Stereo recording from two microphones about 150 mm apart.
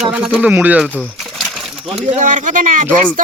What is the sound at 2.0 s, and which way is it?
Speech, 50° right (ahead or behind).